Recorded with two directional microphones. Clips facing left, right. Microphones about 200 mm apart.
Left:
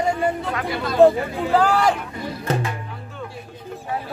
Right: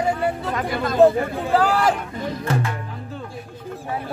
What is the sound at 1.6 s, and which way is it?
Speech, 5° right (ahead or behind).